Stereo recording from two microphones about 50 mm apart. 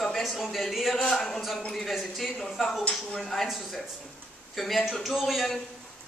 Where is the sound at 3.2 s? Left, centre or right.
Centre.